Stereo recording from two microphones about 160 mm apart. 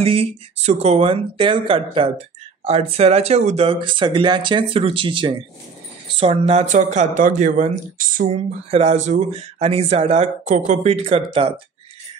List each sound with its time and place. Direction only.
0.0 s speech: 35° right (ahead or behind); by 8.4 s 55° right (ahead or behind)
8.6 s speech: 40° right (ahead or behind)